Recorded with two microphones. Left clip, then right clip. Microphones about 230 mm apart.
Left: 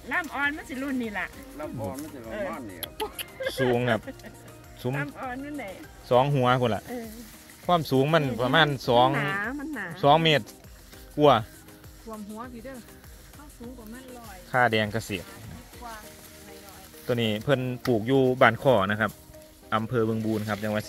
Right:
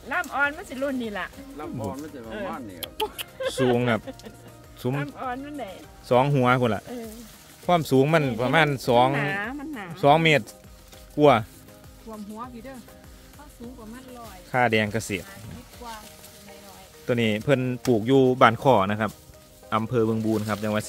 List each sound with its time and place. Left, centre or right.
0.1 s speech: right
2.8 s speech: right; by 9.9 s centre
9.9 s speech: right
12.1 s speech: centre
14.5 s speech: right
17.1 s speech: right